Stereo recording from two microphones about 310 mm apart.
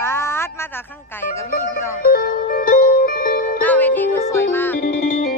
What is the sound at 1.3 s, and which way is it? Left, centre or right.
Music, centre.